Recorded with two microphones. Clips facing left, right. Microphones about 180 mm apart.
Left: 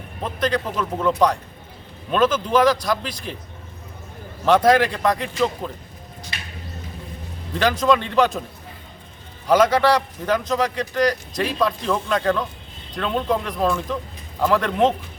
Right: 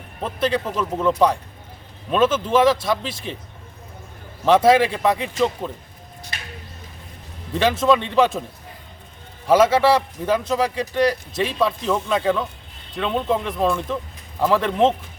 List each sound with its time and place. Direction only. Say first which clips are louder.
0.2 s speech: right 1 dB; 5° right (ahead or behind)
4.4 s speech: right 1 dB; centre (ahead or behind)
7.5 s speech: right 1 dB; centre (ahead or behind)
9.5 s speech: right 1 dB; 5° right (ahead or behind)